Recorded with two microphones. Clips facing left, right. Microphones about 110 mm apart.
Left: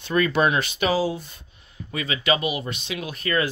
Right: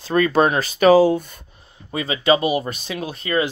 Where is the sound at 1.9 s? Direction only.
30° right (ahead or behind).